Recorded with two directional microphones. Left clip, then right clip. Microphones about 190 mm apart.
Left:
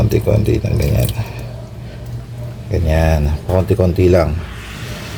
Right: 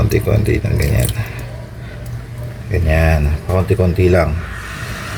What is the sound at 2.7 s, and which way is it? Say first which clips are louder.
Speech: even; 15° left (ahead or behind).